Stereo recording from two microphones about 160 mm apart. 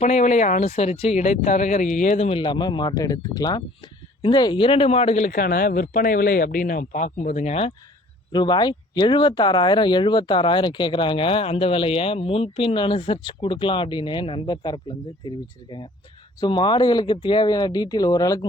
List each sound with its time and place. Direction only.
0.0 s speech: 45° left (ahead or behind)
8.3 s speech: 30° left (ahead or behind)